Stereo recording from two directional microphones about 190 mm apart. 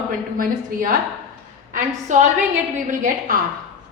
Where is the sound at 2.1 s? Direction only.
40° right (ahead or behind).